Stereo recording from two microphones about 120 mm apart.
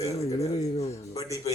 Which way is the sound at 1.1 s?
25° left (ahead or behind).